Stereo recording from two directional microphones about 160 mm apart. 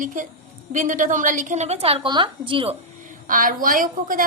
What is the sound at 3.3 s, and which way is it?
Speech, 60° right (ahead or behind).